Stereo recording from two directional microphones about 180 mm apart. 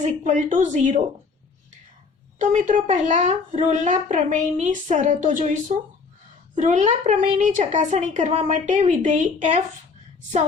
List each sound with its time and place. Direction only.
0.3 s a woman's voice: 40° right (ahead or behind)
2.4 s a woman's voice: 45° right (ahead or behind)